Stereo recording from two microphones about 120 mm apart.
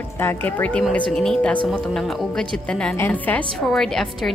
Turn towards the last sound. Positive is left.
turn(degrees=5)  # may be behind; listen again after turning